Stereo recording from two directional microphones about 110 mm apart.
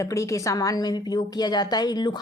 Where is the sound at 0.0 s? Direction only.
30° left (ahead or behind).